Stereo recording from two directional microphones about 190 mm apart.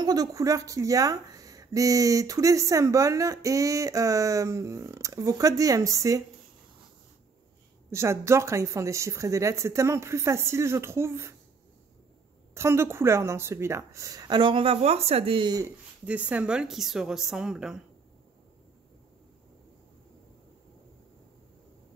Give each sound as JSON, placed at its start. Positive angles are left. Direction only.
{"t": 0.0, "sound": "speech", "side_deg": -20}
{"t": 7.9, "sound": "speech", "side_deg": -15}
{"t": 12.5, "sound": "speech", "side_deg": -15}
{"t": 16.1, "sound": "a woman's voice", "side_deg": -5}